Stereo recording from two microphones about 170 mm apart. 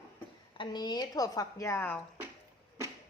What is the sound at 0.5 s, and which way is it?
Speech, 30° left (ahead or behind).